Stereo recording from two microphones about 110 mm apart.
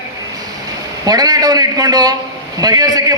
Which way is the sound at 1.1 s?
35° right (ahead or behind).